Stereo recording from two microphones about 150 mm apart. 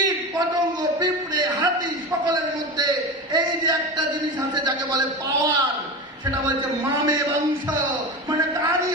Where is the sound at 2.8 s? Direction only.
25° right (ahead or behind).